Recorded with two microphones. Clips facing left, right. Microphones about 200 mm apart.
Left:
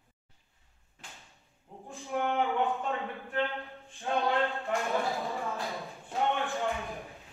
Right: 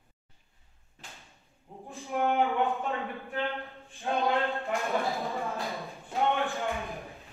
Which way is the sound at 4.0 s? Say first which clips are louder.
Right 1 dB; 15° right (ahead or behind).